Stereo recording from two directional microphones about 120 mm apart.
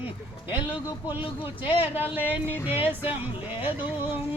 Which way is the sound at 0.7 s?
15° right (ahead or behind).